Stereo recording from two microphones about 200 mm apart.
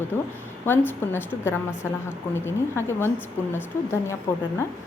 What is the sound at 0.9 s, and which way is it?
A woman's voice, 10° left (ahead or behind).